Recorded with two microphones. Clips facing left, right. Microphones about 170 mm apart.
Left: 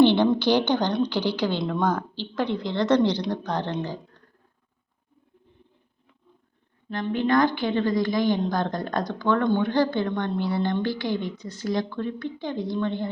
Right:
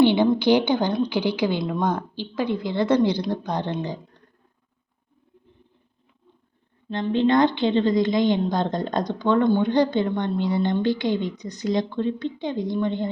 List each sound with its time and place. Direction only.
0.0 s a sound: 10° right (ahead or behind)
0.3 s a woman's voice: 10° right (ahead or behind)
6.9 s a woman's voice: 25° right (ahead or behind)